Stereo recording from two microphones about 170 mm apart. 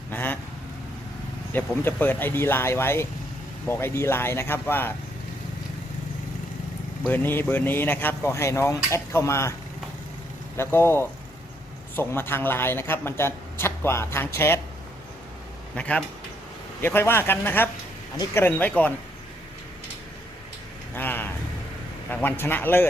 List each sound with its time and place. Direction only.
0.1 s vehicle: 10° left (ahead or behind)
1.5 s speech: 10° left (ahead or behind)
7.1 s speech: 10° left (ahead or behind)
10.6 s speech: 15° left (ahead or behind)
15.7 s speech: 5° left (ahead or behind)
20.9 s a sound: 10° left (ahead or behind)
22.1 s speech: 10° left (ahead or behind)